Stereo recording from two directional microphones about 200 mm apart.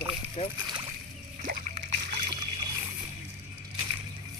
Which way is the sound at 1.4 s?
40° right (ahead or behind).